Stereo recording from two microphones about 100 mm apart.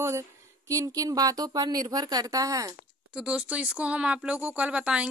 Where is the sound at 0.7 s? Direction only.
35° right (ahead or behind).